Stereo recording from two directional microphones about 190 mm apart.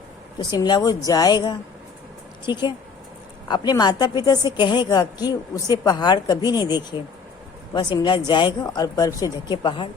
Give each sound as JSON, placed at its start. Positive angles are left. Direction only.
{"t": 0.3, "sound": "a woman's voice", "side_deg": 20}